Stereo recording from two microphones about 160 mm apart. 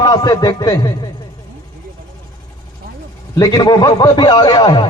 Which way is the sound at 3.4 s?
25° left (ahead or behind).